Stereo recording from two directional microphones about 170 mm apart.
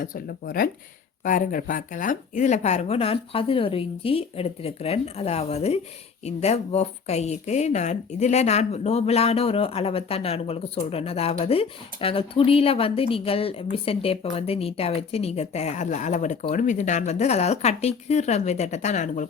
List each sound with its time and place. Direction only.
0.0 s speech: 55° left (ahead or behind)